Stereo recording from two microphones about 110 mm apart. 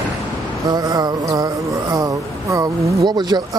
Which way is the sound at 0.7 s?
35° right (ahead or behind).